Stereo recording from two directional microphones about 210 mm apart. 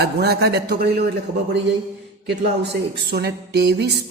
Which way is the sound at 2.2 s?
55° right (ahead or behind).